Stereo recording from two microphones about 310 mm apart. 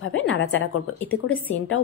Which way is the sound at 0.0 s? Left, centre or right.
Left.